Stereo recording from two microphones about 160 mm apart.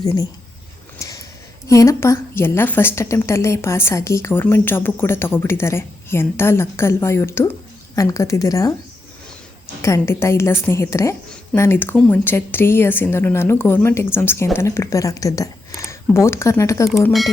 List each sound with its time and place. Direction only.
0.9 s a sound: 20° left (ahead or behind)
1.6 s a woman's voice: 20° left (ahead or behind)
9.8 s speech: 15° left (ahead or behind)
17.1 s speech: centre (ahead or behind)